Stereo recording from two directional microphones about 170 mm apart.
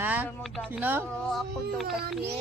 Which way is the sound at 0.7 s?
10° right (ahead or behind).